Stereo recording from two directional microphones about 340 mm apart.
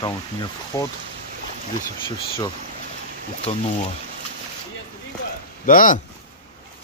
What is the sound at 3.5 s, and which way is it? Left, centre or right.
Speech, centre.